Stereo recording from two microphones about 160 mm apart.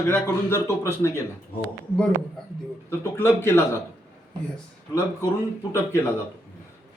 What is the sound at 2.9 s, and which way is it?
Speech, 15° left (ahead or behind).